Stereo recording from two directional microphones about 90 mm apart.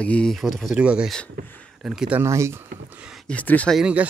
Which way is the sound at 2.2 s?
30° right (ahead or behind).